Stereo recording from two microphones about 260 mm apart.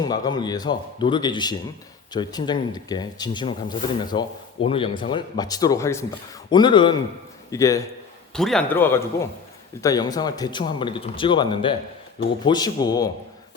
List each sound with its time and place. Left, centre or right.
0.0 s speech: centre
8.3 s a man's voice: centre